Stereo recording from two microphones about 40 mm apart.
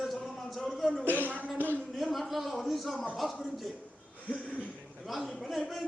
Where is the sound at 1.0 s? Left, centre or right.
Right.